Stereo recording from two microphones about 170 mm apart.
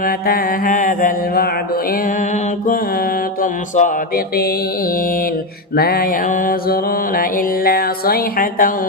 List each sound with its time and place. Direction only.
0.0 s mantra: 60° left (ahead or behind)